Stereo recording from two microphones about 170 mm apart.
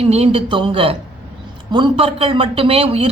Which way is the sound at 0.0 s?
35° right (ahead or behind).